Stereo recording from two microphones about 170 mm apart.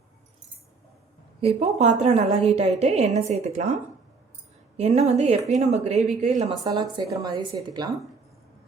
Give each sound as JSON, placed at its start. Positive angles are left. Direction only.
{"t": 1.4, "sound": "speech", "side_deg": -35}
{"t": 4.8, "sound": "speech", "side_deg": -40}
{"t": 6.5, "sound": "a woman's voice", "side_deg": -25}